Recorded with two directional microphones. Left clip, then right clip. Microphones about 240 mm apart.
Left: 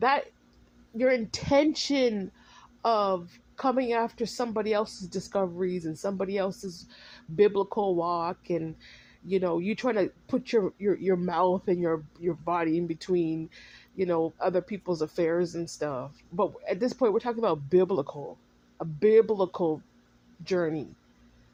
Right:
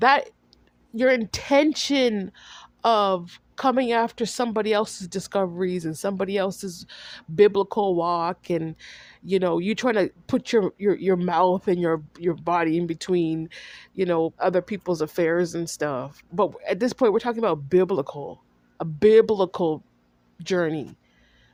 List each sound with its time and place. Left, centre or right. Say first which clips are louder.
0.0 s speech: right 7 dB; right